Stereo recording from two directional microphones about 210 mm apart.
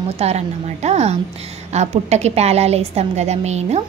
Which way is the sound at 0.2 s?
30° right (ahead or behind).